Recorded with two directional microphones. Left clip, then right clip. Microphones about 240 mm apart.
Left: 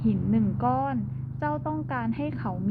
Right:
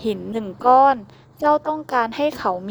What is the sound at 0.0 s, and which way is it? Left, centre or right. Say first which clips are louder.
A woman's voice: right 4 dB; right.